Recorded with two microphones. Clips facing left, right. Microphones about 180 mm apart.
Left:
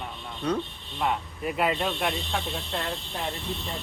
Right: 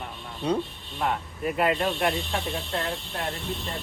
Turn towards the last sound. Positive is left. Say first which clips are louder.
# right 1 dB
turn(degrees=0)  # may be behind; listen again after turning